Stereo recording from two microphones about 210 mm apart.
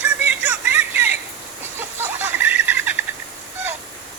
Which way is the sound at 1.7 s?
10° right (ahead or behind).